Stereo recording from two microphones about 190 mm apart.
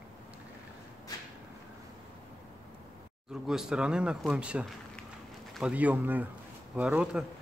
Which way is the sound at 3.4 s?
5° right (ahead or behind).